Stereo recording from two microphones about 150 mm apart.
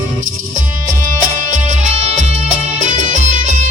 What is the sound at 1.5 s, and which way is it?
Music, 55° right (ahead or behind).